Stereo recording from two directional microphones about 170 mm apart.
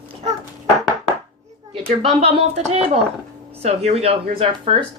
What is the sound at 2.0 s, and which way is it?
Speech, 40° right (ahead or behind).